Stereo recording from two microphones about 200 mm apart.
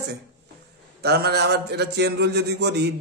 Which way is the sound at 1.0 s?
55° right (ahead or behind).